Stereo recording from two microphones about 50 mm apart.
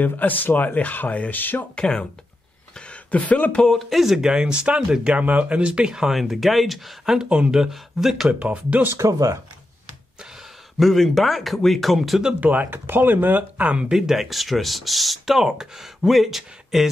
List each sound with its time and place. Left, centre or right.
0.0 s speech: left
1.3 s speech: left
1.8 s speech: centre
3.9 s speech: centre
4.3 s a man's voice: centre
5.1 s speech: right
6.1 s speech: centre
7.2 s speech: right
7.5 s a man's voice: centre
8.3 s speech: right
8.9 s speech: right
10.8 s speech: centre
12.4 s speech: right
13.8 s speech: centre